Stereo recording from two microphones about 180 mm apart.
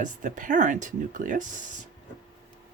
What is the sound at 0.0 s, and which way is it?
Speech, 45° right (ahead or behind).